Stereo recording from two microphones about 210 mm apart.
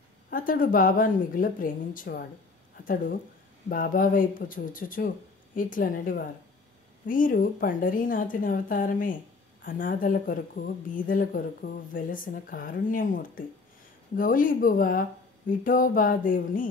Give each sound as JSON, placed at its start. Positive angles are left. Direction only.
{"t": 0.3, "sound": "speech", "side_deg": 40}